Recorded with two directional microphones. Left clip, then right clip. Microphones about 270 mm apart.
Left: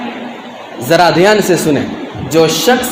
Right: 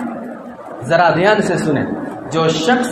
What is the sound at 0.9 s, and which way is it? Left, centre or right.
A man's voice, left.